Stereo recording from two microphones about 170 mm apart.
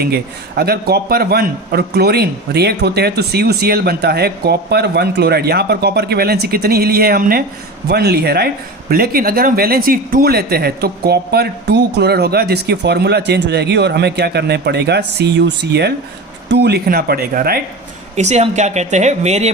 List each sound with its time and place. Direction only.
0.0 s speech: 70° right (ahead or behind); by 15.9 s 85° right
16.5 s speech: 75° right (ahead or behind)
18.2 s speech: 40° right (ahead or behind)